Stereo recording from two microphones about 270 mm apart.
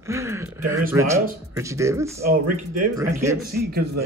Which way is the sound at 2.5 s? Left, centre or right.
Right.